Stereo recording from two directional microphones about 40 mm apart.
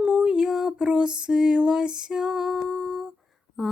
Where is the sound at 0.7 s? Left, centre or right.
Right; by 2.6 s centre.